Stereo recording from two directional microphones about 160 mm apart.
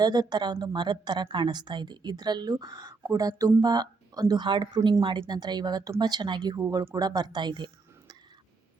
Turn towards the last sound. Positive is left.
turn(degrees=-30)  # may be behind; listen again after turning